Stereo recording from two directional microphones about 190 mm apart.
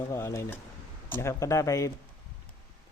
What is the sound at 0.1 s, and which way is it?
Speech, 15° left (ahead or behind).